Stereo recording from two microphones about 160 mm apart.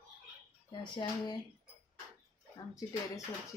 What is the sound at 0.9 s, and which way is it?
Speech, 30° left (ahead or behind).